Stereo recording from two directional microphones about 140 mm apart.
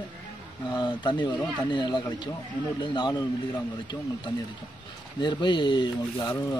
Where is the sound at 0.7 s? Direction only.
30° left (ahead or behind).